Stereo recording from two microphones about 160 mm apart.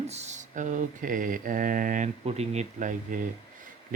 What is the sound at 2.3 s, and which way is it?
Speech, 45° right (ahead or behind).